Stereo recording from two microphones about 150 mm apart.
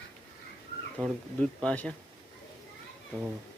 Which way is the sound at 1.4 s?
10° left (ahead or behind).